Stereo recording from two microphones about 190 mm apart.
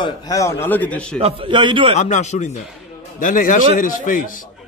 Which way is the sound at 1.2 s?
25° right (ahead or behind).